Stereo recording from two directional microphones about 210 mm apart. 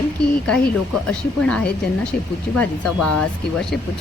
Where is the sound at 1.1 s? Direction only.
5° left (ahead or behind).